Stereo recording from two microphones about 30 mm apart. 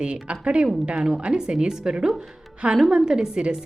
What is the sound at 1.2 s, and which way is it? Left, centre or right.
A woman's voice, right.